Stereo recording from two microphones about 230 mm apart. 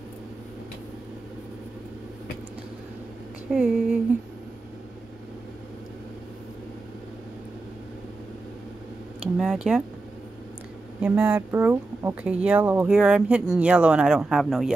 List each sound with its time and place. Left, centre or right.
3.5 s speech: centre
9.4 s speech: centre
11.0 s speech: centre